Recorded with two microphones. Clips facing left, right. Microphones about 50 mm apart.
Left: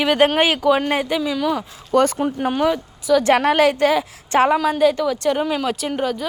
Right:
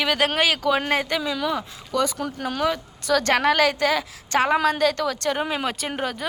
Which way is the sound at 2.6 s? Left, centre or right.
Centre.